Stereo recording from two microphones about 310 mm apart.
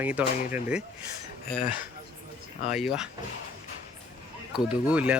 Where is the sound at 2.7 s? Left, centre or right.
Centre.